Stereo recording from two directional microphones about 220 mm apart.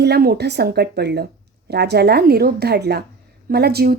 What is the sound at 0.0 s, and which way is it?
A woman's voice, 45° right (ahead or behind).